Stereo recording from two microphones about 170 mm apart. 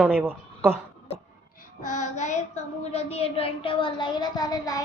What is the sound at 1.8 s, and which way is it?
Child singing, 45° left (ahead or behind).